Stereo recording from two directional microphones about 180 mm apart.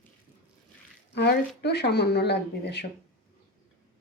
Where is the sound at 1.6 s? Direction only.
65° left (ahead or behind).